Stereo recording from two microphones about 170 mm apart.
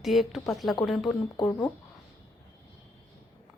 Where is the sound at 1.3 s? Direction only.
25° left (ahead or behind).